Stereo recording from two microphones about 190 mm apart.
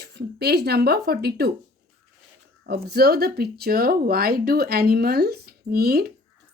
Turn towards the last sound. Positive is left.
turn(degrees=-55)  # may be behind; listen again after turning